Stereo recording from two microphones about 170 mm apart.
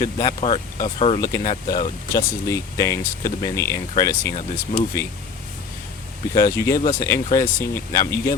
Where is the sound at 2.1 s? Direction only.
20° left (ahead or behind).